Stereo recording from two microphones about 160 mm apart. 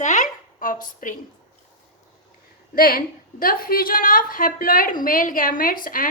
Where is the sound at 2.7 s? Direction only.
65° left (ahead or behind).